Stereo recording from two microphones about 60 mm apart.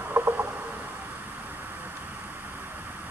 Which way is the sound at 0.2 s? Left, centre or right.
Right.